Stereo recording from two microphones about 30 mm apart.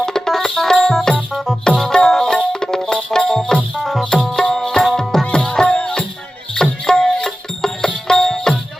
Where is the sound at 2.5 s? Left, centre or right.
Left.